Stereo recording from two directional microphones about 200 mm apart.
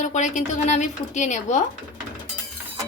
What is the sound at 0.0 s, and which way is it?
Speech, 35° left (ahead or behind).